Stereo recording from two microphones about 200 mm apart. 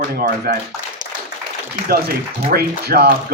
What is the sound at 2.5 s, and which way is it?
Speech, 50° right (ahead or behind).